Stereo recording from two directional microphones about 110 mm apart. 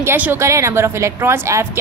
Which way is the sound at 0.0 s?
20° right (ahead or behind).